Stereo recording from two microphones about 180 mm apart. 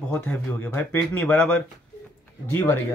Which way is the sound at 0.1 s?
10° left (ahead or behind).